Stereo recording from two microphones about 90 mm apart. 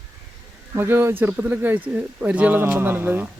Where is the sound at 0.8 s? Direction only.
25° right (ahead or behind).